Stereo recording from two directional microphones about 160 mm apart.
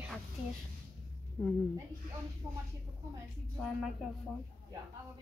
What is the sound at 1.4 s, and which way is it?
Speech, 10° left (ahead or behind).